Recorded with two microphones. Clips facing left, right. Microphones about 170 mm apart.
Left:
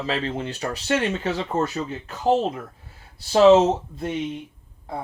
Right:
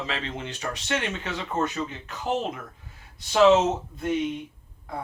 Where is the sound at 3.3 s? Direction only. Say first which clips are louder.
Left 4 dB; 35° left (ahead or behind).